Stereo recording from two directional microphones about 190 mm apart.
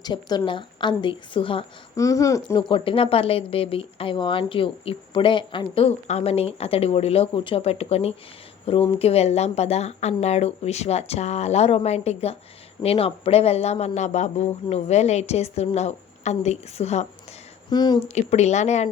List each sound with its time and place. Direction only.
0.0 s speech: 20° left (ahead or behind)
2.0 s speech: 15° left (ahead or behind); by 17.1 s 35° left (ahead or behind)
17.7 s speech: 20° left (ahead or behind)
18.1 s speech: 35° left (ahead or behind)